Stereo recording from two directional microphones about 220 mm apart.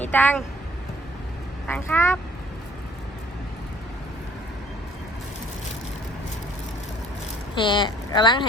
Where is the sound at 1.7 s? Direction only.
10° left (ahead or behind).